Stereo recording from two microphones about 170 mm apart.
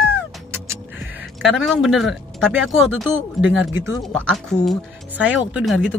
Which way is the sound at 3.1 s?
10° right (ahead or behind).